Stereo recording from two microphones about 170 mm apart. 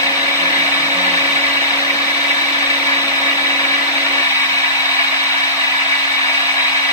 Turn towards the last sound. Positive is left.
turn(degrees=20)  # may be behind; listen again after turning